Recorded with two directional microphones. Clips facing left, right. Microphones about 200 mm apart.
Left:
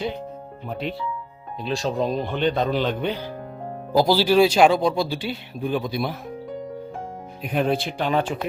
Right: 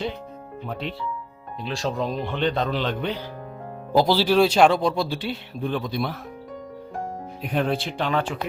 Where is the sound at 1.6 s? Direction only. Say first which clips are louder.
Left 3 dB; 20° left (ahead or behind).